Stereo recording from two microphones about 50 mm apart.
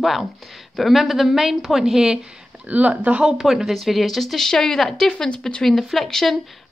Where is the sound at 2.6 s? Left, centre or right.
Right.